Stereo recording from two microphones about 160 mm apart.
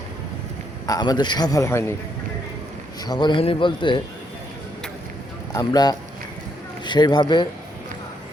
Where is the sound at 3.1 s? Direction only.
30° left (ahead or behind).